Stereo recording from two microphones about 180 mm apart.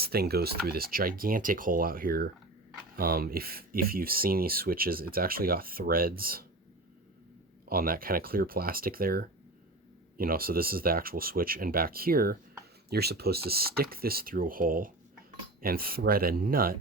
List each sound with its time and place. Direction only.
0.0 s speech: 60° right (ahead or behind)
7.6 s speech: 55° right (ahead or behind)